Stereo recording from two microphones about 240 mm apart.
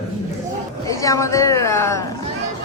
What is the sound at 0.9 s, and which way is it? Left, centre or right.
A woman's voice, centre.